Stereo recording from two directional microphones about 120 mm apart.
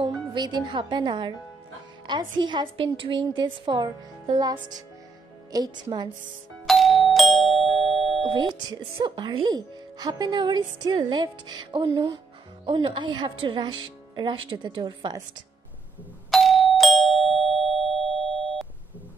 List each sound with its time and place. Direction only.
0.0 s speech: 40° right (ahead or behind)
6.6 s doorbell: centre (ahead or behind)
8.2 s a woman's voice: 40° right (ahead or behind)
16.3 s doorbell: centre (ahead or behind)